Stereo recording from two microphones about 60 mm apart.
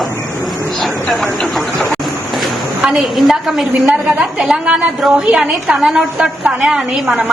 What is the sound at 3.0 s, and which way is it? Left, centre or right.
A woman's voice, centre.